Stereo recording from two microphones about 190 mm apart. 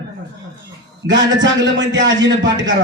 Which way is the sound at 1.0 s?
70° right (ahead or behind).